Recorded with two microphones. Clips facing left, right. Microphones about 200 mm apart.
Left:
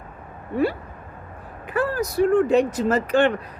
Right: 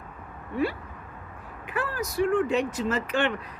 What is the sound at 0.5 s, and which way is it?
Speech, 40° left (ahead or behind).